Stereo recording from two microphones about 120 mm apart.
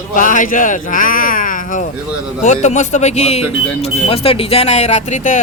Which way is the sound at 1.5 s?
90° left.